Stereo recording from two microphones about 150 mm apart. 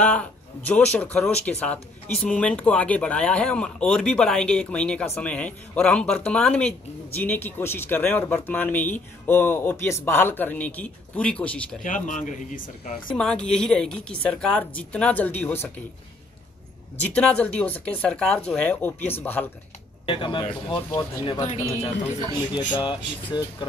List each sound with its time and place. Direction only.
0.0 s speech: 10° left (ahead or behind)
11.8 s speech: 55° left (ahead or behind)
13.1 s speech: 5° left (ahead or behind)
17.0 s speech: 10° left (ahead or behind)
20.1 s speech: 35° left (ahead or behind)
21.5 s speech: 45° left (ahead or behind)
22.5 s speech: 30° left (ahead or behind)